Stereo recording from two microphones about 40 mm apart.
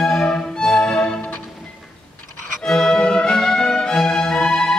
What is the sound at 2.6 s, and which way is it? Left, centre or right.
Music, centre.